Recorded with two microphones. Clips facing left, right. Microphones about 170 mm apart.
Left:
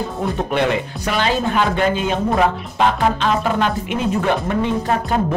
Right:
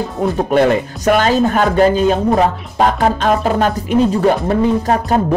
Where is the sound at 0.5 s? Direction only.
45° right (ahead or behind).